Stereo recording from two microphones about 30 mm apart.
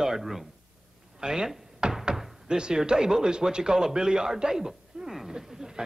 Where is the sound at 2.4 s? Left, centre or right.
Right.